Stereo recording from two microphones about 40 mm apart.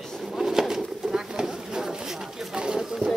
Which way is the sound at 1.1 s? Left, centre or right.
Centre.